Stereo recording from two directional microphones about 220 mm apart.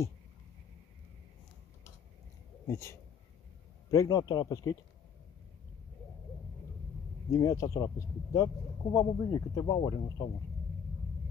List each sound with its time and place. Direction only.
2.7 s speech: 10° left (ahead or behind)
7.2 s speech: 15° left (ahead or behind)